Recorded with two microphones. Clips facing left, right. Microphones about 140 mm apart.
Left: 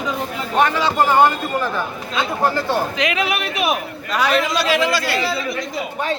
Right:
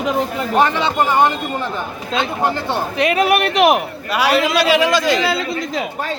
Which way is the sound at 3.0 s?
45° right (ahead or behind).